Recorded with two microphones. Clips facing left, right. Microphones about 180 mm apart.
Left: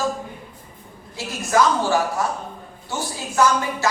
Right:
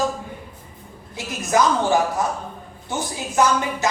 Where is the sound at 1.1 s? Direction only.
20° right (ahead or behind).